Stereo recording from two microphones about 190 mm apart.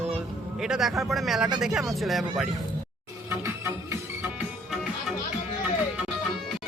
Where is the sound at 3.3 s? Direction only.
15° right (ahead or behind).